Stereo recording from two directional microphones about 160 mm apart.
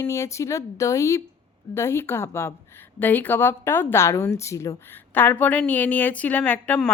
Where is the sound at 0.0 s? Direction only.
20° left (ahead or behind).